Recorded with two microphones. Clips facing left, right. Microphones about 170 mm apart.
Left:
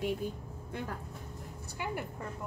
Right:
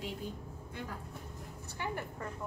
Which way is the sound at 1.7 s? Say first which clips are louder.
Left 1 dB; 10° left (ahead or behind).